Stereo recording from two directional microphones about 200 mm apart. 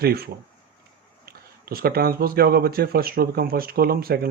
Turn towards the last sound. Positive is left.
turn(degrees=-50)  # may be behind; listen again after turning